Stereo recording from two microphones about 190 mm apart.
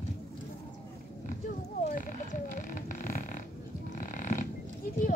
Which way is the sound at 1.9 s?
45° left (ahead or behind).